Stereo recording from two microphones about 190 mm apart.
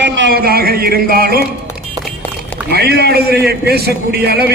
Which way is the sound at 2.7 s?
60° right (ahead or behind).